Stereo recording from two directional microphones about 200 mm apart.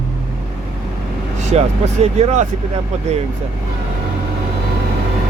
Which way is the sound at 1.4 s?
35° right (ahead or behind).